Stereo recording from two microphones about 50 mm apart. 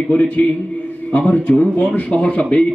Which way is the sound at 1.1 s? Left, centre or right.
Left.